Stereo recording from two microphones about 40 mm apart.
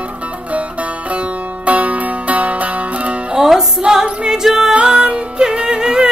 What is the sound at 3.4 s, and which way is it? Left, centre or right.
Music, centre.